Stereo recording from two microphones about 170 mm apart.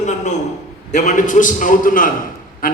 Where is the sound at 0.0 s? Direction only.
45° left (ahead or behind).